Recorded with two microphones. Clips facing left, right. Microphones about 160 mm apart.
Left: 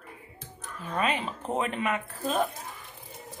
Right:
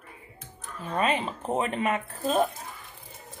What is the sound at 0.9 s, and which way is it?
A woman's voice, 25° right (ahead or behind).